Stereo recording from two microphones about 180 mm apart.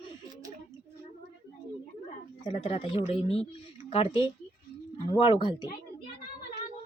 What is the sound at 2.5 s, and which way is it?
Speech, 40° left (ahead or behind).